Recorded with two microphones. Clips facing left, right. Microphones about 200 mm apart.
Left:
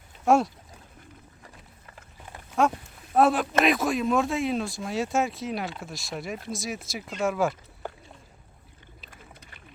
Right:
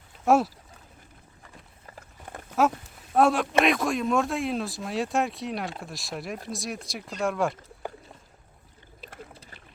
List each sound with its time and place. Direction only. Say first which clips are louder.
0.3 s speech: even; centre (ahead or behind)
1.9 s vehicle: right 4 dB; 40° right (ahead or behind)
2.6 s speech: even; centre (ahead or behind)
9.3 s a sound: right 2 dB; 30° right (ahead or behind)